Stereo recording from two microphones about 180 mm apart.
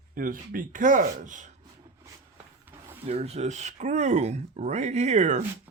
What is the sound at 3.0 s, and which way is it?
Speech, 35° right (ahead or behind).